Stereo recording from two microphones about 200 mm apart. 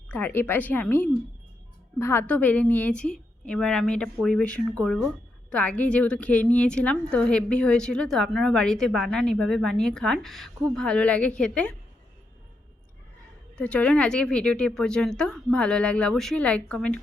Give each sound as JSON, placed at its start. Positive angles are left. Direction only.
{"t": 0.1, "sound": "a woman's voice", "side_deg": 10}
{"t": 13.6, "sound": "a woman's voice", "side_deg": 5}